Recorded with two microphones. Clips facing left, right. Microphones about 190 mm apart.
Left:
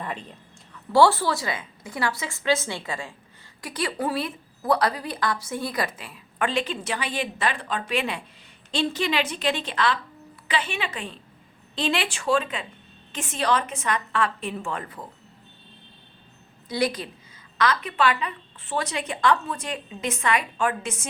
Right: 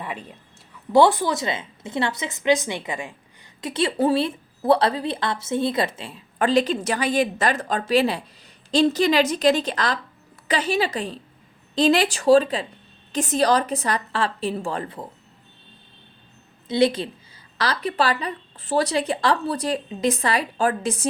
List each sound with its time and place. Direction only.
0.0 s a woman's voice: 10° right (ahead or behind); by 15.0 s 30° right (ahead or behind)
16.6 s a woman's voice: 25° right (ahead or behind)